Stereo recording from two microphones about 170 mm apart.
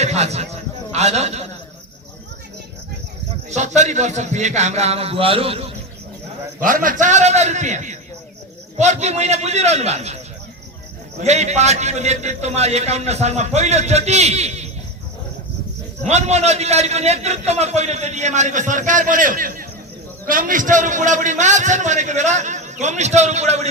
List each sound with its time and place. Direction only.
0.0 s a man's voice: 40° right (ahead or behind)
3.5 s a man's voice: 45° right (ahead or behind)
6.6 s a man's voice: 55° right (ahead or behind)
11.2 s a man's voice: 40° right (ahead or behind)
16.0 s a man's voice: 40° right (ahead or behind)